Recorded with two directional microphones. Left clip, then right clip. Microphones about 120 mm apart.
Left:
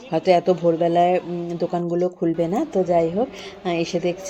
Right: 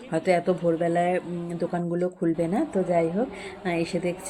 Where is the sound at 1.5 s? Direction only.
25° left (ahead or behind).